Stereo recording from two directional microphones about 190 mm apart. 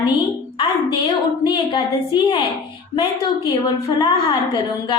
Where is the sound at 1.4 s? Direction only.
25° left (ahead or behind).